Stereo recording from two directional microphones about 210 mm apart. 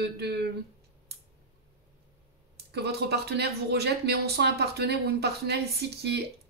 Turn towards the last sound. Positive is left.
turn(degrees=-50)  # may be behind; listen again after turning